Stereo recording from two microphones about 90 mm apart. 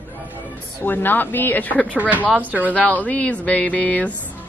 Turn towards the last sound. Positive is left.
turn(degrees=15)  # may be behind; listen again after turning